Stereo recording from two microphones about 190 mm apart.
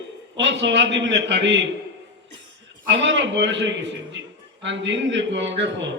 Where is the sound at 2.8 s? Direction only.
70° right (ahead or behind).